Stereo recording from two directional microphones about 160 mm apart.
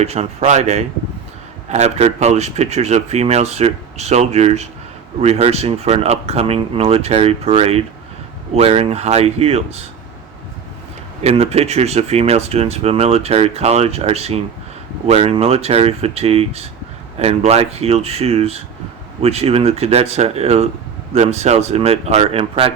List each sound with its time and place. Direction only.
0.0 s speech: 40° right (ahead or behind)
11.2 s speech: 40° right (ahead or behind)